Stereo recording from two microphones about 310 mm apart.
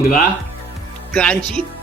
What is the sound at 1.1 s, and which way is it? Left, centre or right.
Speech, centre.